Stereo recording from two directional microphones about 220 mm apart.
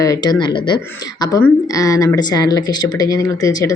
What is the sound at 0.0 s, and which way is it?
Speech, 15° left (ahead or behind).